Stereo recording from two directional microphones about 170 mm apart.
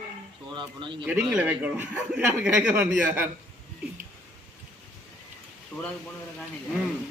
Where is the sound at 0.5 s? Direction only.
30° right (ahead or behind).